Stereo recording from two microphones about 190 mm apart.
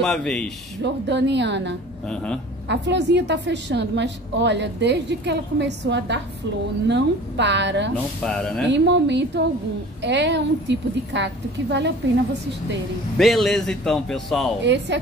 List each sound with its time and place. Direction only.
0.0 s speech: 5° left (ahead or behind)
0.8 s a woman's voice: 70° right (ahead or behind)
2.0 s speech: 5° left (ahead or behind)
2.7 s a woman's voice: 70° right (ahead or behind)
8.2 s speech: 5° left (ahead or behind)
8.6 s a woman's voice: 70° right (ahead or behind)
13.2 s speech: centre (ahead or behind)
14.6 s a woman's voice: 70° right (ahead or behind)